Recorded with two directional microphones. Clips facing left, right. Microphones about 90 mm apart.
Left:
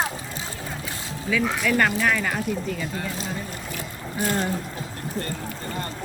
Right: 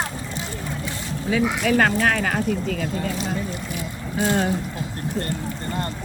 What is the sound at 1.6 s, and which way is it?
Speech, 60° right (ahead or behind).